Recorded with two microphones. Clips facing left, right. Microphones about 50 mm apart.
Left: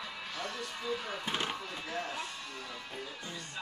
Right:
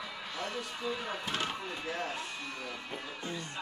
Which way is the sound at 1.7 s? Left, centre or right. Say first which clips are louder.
Right 1 dB; right.